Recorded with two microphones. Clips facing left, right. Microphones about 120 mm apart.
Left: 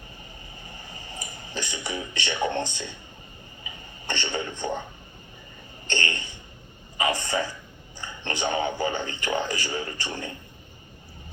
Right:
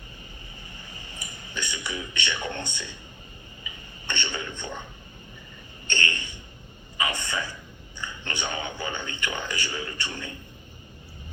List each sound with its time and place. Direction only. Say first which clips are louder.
1.1 s speech: left 3 dB; 35° left (ahead or behind)
3.6 s a sound: left 3 dB; 35° left (ahead or behind)
5.9 s speech: left 1 dB; 35° left (ahead or behind)